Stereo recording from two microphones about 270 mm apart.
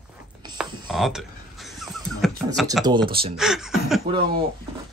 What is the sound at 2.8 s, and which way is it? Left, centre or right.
Speech, centre.